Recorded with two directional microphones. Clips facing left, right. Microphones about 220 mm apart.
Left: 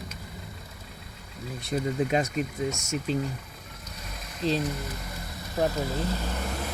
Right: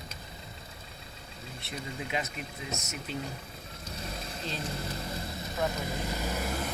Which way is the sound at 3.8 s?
30° right (ahead or behind).